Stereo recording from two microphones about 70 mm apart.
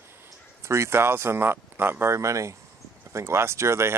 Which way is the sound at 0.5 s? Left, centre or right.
Right.